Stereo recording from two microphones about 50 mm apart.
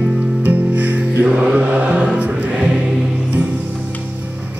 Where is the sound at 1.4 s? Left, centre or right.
Right.